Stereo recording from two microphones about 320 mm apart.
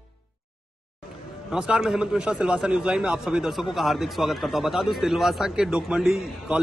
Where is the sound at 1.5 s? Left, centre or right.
Centre.